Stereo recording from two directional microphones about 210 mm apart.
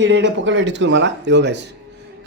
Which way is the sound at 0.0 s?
60° right (ahead or behind).